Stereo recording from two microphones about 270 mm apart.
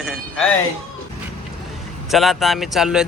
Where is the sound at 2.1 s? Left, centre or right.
Centre.